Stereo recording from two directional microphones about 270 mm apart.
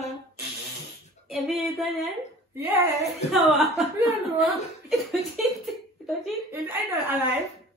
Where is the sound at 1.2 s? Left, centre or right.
Centre.